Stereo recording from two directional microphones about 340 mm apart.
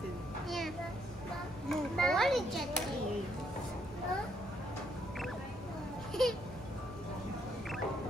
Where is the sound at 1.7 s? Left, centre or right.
Centre.